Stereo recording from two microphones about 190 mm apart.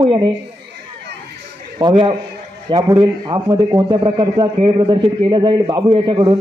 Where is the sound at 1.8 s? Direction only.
25° right (ahead or behind).